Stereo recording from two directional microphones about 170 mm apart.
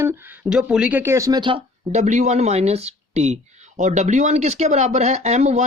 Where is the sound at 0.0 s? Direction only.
15° right (ahead or behind).